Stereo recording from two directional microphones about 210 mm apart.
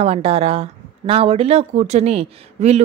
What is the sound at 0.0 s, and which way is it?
Speech, 30° right (ahead or behind).